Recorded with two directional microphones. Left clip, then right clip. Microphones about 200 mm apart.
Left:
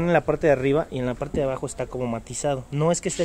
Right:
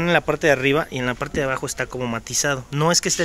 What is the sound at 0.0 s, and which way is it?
Speech, centre (ahead or behind).